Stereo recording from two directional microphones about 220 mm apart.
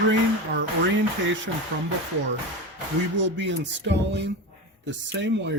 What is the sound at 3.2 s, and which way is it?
Speech, 55° right (ahead or behind).